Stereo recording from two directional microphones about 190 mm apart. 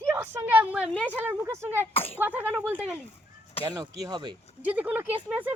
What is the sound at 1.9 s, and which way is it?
Speech, 30° left (ahead or behind).